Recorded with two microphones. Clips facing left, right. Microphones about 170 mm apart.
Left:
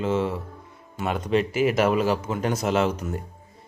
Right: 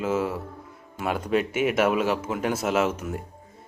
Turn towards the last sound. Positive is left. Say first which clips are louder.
# left 1 dB
turn(degrees=-5)  # may be behind; listen again after turning